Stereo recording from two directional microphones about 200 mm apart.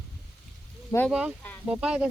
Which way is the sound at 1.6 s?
5° right (ahead or behind).